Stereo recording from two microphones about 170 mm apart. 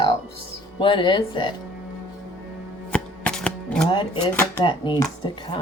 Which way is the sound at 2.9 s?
5° left (ahead or behind).